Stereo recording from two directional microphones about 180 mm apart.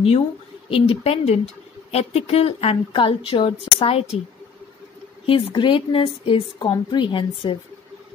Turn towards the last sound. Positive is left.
turn(degrees=25)  # may be behind; listen again after turning